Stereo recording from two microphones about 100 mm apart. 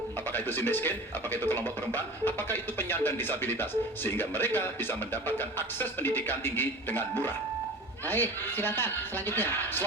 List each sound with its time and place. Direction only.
0.3 s speech: 20° left (ahead or behind)